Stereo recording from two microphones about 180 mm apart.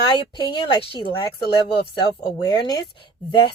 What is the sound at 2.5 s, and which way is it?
Speech, 20° left (ahead or behind).